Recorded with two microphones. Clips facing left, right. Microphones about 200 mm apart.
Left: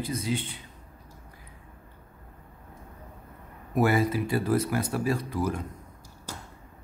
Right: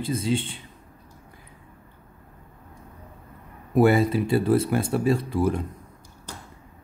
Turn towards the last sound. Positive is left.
turn(degrees=-25)  # may be behind; listen again after turning